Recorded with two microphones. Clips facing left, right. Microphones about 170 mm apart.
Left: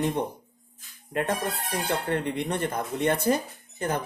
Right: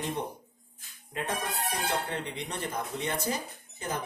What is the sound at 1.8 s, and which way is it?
Speech, 55° left (ahead or behind).